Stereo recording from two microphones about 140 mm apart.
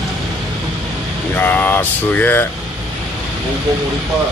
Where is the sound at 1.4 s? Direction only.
15° left (ahead or behind).